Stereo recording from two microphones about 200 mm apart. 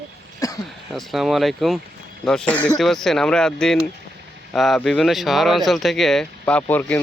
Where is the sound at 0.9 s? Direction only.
Centre (ahead or behind).